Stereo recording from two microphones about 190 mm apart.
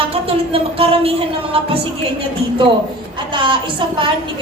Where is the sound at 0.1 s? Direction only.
30° right (ahead or behind).